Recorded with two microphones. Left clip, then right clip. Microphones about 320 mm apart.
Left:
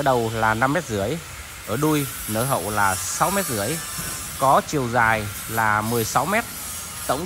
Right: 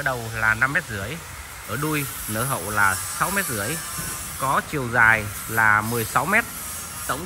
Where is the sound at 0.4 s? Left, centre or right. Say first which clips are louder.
Even; centre.